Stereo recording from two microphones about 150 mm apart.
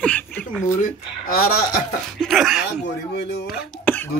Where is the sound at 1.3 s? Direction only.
85° left.